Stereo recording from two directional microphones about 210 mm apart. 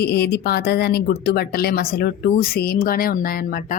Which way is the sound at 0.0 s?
50° left (ahead or behind).